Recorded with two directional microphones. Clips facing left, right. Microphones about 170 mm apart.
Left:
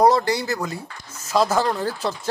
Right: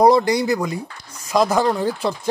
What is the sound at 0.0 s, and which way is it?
Speech, 15° right (ahead or behind).